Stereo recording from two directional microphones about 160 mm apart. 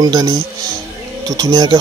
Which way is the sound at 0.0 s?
25° right (ahead or behind).